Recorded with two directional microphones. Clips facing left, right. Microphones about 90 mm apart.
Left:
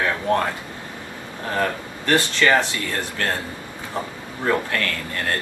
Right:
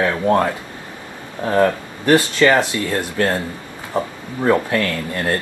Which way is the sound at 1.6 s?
20° right (ahead or behind).